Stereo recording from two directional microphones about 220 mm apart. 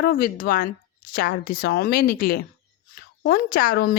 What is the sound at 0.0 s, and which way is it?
A woman's voice, 40° left (ahead or behind).